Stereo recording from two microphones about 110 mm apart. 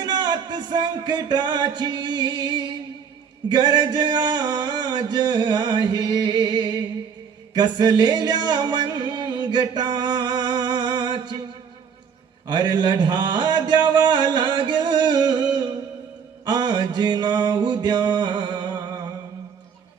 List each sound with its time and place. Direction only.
0.0 s music: 45° right (ahead or behind)
12.5 s a sound: 45° right (ahead or behind)
16.5 s music: 45° right (ahead or behind)